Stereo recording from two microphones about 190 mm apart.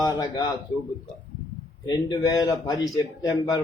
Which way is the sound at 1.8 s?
20° left (ahead or behind).